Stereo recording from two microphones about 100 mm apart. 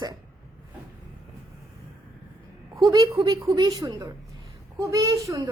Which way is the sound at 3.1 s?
50° right (ahead or behind).